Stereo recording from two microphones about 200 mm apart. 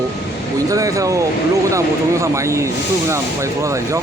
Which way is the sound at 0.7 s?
15° right (ahead or behind).